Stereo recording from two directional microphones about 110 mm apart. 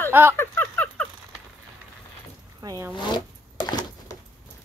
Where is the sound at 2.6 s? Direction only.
40° right (ahead or behind).